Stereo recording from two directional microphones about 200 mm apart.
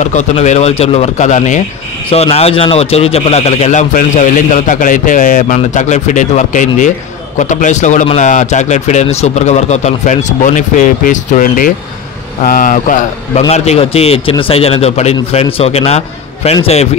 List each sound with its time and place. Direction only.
0.0 s speech: 35° left (ahead or behind)
13.5 s a man's voice: 30° left (ahead or behind)